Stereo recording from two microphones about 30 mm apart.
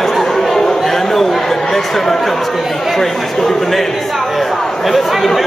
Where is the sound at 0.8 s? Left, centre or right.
Centre.